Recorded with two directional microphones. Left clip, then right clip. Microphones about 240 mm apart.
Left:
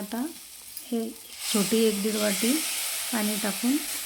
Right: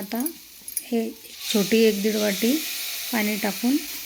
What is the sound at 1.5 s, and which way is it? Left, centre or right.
Speech, centre.